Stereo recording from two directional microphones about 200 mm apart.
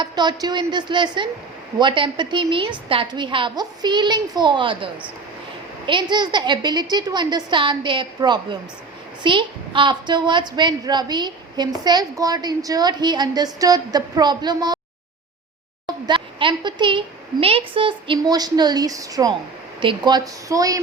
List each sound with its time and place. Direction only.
0.0 s a woman's voice: 20° right (ahead or behind)
16.0 s a sound: 25° right (ahead or behind)
17.4 s a woman's voice: 25° right (ahead or behind)